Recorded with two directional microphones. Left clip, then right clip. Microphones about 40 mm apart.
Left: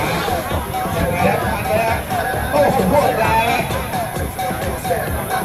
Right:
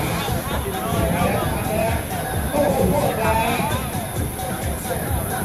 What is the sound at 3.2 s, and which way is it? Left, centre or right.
Music, centre.